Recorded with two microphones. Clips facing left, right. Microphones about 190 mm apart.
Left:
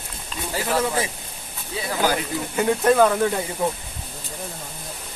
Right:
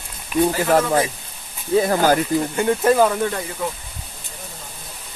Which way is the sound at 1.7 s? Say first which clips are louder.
Right 7 dB; 50° right (ahead or behind).